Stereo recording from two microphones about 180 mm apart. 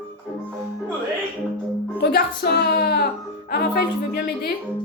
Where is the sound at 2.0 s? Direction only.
65° left (ahead or behind).